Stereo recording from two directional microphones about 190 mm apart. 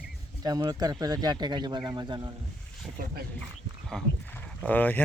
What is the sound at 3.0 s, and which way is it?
Speech, 50° right (ahead or behind).